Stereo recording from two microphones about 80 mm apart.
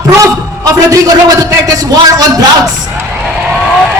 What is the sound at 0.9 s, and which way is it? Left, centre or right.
A woman's voice, right.